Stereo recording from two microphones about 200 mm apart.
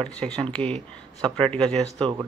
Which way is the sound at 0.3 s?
5° left (ahead or behind).